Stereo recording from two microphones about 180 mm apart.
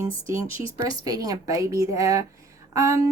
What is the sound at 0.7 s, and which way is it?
Speech, 20° right (ahead or behind).